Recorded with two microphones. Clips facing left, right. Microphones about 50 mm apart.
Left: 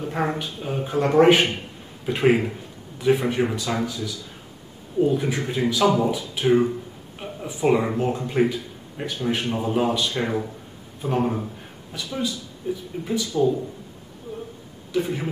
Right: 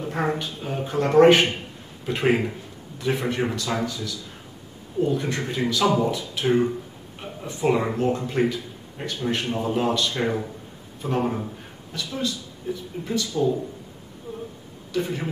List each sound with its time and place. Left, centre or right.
0.0 s a man's voice: centre
10.2 s a man's voice: centre
11.9 s a man's voice: centre
15.0 s a man's voice: centre